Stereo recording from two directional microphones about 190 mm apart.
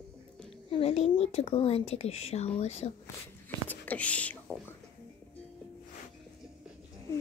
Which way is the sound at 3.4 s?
10° left (ahead or behind).